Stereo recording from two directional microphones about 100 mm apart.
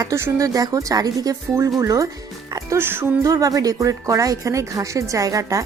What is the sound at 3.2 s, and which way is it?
A woman's voice, 35° right (ahead or behind).